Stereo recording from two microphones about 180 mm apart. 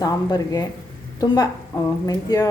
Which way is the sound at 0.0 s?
20° left (ahead or behind).